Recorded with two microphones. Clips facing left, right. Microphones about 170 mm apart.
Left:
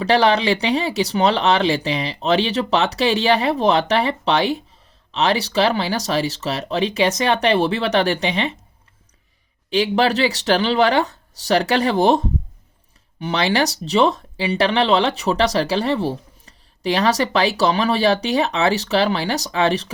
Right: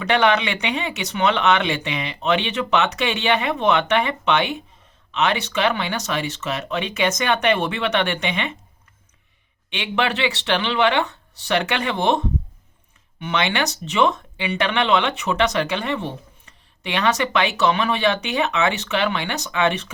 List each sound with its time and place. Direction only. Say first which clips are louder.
0.0 s speech: left 3 dB; 35° left (ahead or behind)
9.6 s speech: left 6 dB; 35° left (ahead or behind)